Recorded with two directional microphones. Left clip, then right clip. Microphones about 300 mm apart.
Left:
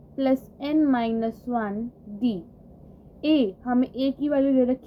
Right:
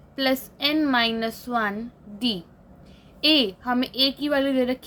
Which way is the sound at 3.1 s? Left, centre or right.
Centre.